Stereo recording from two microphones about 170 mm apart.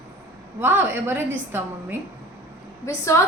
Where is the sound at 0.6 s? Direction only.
10° right (ahead or behind).